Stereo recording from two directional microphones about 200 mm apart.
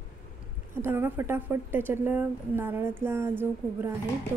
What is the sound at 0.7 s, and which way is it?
Speech, 10° right (ahead or behind).